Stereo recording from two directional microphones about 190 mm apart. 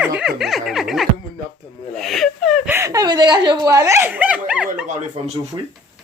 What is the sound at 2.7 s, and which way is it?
Chuckle, 15° right (ahead or behind).